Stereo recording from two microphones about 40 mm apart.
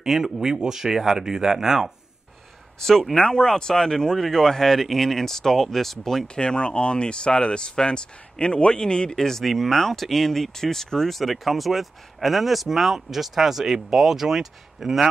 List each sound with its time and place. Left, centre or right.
0.0 s speech: centre
2.8 s speech: centre
3.3 s speech: centre
6.2 s speech: left
9.1 s speech: centre
11.1 s speech: centre